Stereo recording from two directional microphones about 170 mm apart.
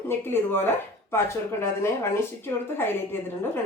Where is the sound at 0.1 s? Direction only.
15° left (ahead or behind).